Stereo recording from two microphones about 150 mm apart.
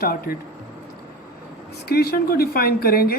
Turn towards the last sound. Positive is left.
turn(degrees=85)